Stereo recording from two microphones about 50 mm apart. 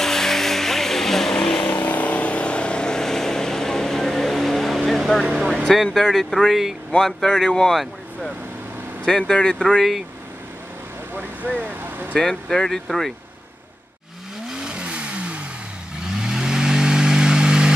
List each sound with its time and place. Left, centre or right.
0.0 s vehicle: centre
1.7 s vehicle: left; by 5.2 s centre
5.9 s speech: centre
9.0 s speech: centre
11.4 s speech: right
12.2 s speech: centre
14.6 s vehicle: right